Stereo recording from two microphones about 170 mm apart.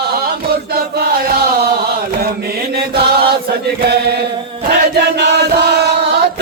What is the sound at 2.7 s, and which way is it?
Chant, 70° right (ahead or behind).